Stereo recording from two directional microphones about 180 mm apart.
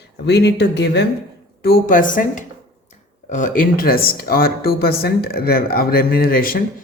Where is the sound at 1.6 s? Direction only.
55° left (ahead or behind).